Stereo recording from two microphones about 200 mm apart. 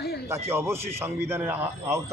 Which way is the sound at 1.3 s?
10° right (ahead or behind).